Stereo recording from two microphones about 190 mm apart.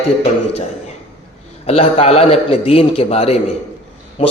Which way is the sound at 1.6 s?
35° left (ahead or behind).